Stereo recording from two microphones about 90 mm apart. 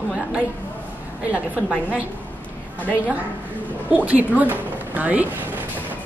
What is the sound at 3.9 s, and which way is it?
A woman's voice, 15° right (ahead or behind).